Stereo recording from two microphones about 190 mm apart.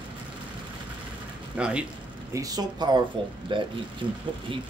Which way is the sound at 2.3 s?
20° right (ahead or behind).